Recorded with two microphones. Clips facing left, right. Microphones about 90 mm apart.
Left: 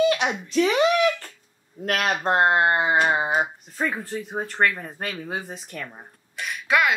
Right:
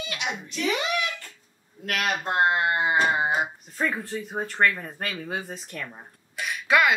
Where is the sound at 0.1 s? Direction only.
40° left (ahead or behind).